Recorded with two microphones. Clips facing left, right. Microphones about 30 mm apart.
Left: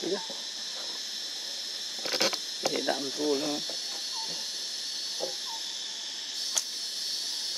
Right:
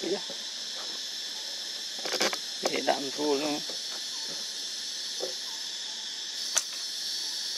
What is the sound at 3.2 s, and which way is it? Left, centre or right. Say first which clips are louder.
Speech: right 1 dB; centre.